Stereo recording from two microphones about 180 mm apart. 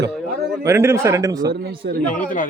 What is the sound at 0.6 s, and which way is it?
Speech, 15° right (ahead or behind).